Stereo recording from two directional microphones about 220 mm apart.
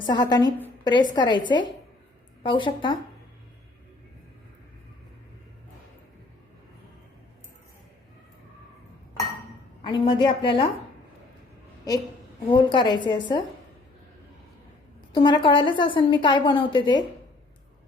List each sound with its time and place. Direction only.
0.0 s a woman's voice: 20° left (ahead or behind)
9.8 s a woman's voice: 20° left (ahead or behind)
12.5 s a woman's voice: 20° left (ahead or behind)
15.1 s a woman's voice: 20° left (ahead or behind)